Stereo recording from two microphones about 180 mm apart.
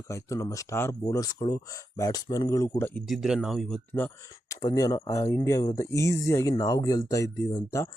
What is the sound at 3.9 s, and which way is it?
Speech, 10° left (ahead or behind).